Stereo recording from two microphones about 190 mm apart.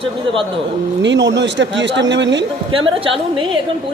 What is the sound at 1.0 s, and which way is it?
Speech, 70° right (ahead or behind).